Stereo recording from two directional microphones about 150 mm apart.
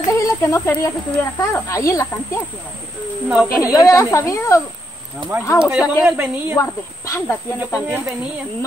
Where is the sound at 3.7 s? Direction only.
20° left (ahead or behind).